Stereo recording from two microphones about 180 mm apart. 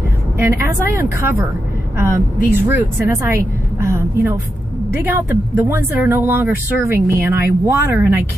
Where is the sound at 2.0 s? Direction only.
15° right (ahead or behind).